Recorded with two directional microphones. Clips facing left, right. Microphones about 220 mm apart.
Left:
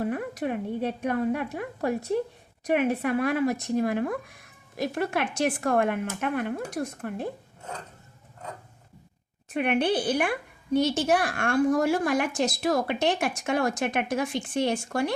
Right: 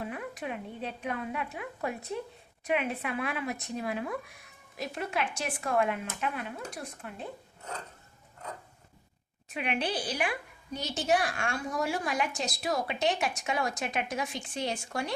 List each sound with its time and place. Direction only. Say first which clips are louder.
0.0 s a woman's voice: left 8 dB; 45° left (ahead or behind)
9.5 s a woman's voice: left 8 dB; 55° left (ahead or behind)